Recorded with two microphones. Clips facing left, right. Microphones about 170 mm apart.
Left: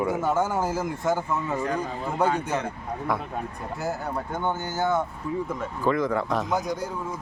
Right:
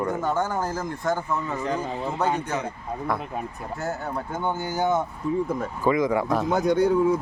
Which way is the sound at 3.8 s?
Centre (ahead or behind).